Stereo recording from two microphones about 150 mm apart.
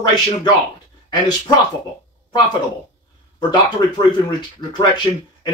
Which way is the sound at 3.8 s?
30° left (ahead or behind).